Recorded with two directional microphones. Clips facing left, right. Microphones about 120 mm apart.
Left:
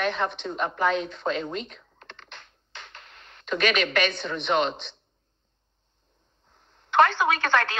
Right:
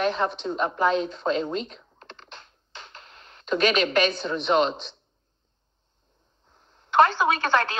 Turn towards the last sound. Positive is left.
turn(degrees=-35)  # may be behind; listen again after turning